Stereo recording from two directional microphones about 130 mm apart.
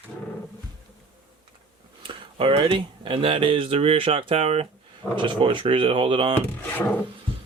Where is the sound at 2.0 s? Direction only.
40° right (ahead or behind).